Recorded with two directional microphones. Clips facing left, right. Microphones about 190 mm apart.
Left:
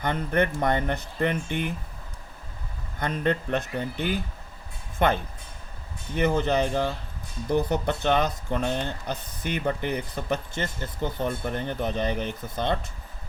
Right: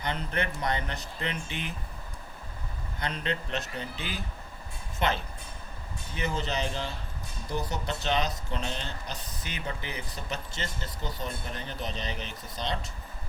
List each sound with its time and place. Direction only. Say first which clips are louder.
0.0 s speech: left 7 dB; 50° left (ahead or behind)
3.0 s speech: left 7 dB; 50° left (ahead or behind)